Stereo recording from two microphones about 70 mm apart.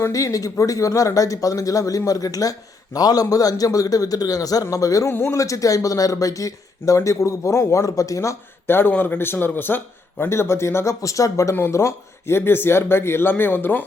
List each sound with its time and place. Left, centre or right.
0.1 s a man's voice: left
5.0 s speech: left
5.3 s speech: left
8.6 s speech: left